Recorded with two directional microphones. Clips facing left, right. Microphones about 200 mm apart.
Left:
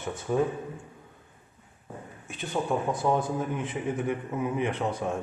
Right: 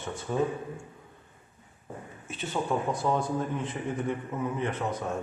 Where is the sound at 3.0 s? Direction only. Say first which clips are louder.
Left 1 dB; 10° left (ahead or behind).